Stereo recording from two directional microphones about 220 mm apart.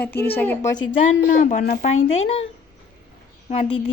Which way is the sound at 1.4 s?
35° left (ahead or behind).